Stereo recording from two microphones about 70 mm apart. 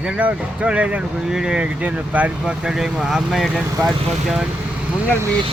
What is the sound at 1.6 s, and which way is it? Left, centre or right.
Speech, centre.